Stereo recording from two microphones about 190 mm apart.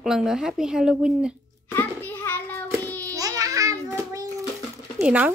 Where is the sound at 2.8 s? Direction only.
10° left (ahead or behind).